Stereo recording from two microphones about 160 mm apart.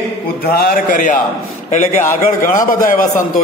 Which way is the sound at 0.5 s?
65° left (ahead or behind).